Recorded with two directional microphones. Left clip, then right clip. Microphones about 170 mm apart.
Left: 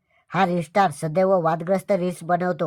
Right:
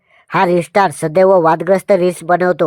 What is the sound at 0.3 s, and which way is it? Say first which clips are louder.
Speech: right 9 dB; 35° right (ahead or behind).